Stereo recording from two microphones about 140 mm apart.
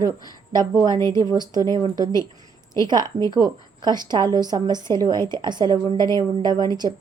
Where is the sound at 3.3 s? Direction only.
30° right (ahead or behind).